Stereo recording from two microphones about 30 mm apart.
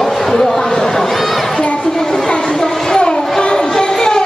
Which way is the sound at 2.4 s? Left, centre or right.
Left.